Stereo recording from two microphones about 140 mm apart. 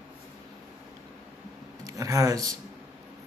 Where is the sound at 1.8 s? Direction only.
25° right (ahead or behind).